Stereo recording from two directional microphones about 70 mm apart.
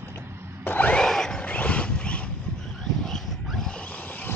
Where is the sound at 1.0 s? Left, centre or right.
Centre.